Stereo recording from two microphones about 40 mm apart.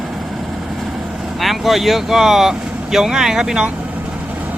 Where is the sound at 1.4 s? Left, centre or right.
Centre.